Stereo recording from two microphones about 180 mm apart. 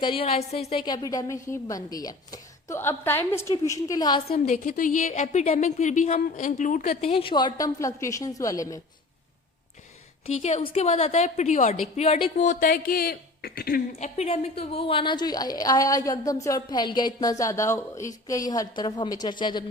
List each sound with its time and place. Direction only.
0.0 s a woman's voice: 30° left (ahead or behind)
4.3 s a woman's voice: 45° left (ahead or behind); by 8.8 s 20° left (ahead or behind)
10.2 s a woman's voice: 35° left (ahead or behind); by 13.8 s 55° left (ahead or behind)
14.0 s a woman's voice: 35° left (ahead or behind)